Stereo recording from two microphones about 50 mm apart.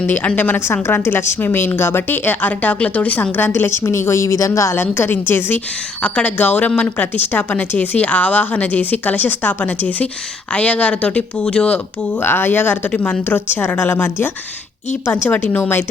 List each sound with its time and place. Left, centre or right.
0.3 s a woman's voice: left
3.3 s a woman's voice: left
3.7 s a woman's voice: left
4.8 s a woman's voice: left
6.0 s speech: left
12.2 s a woman's voice: left
12.9 s speech: left
13.2 s a woman's voice: left